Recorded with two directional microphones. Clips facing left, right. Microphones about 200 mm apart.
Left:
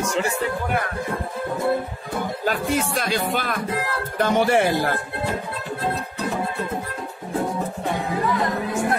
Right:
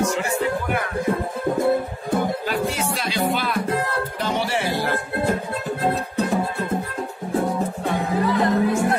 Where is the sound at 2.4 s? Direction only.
50° left (ahead or behind).